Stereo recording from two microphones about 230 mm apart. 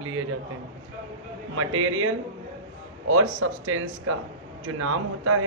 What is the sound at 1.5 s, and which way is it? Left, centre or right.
A man's voice, right.